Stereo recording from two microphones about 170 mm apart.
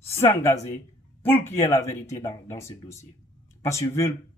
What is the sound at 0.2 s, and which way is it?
Speech, 15° left (ahead or behind).